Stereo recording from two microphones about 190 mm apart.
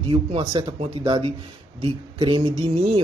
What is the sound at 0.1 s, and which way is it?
Speech, 25° right (ahead or behind).